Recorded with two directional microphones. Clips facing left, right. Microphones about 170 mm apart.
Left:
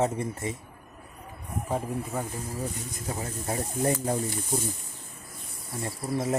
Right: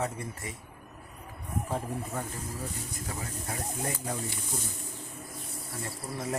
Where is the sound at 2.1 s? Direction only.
10° left (ahead or behind).